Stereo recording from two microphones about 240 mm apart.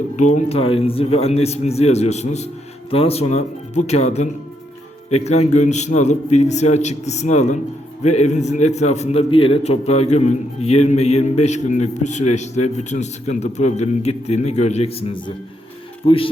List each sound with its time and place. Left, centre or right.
0.3 s a man's voice: left